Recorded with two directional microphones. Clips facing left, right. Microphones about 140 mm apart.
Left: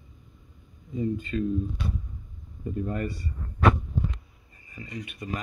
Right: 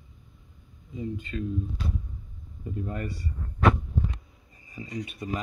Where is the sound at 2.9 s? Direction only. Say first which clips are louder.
Left 3 dB; 60° left (ahead or behind).